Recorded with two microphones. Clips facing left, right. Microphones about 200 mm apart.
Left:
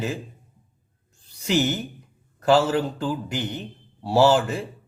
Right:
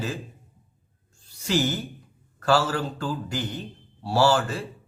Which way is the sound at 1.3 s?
20° left (ahead or behind).